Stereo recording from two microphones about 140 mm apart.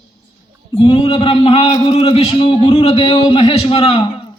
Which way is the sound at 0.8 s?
35° left (ahead or behind).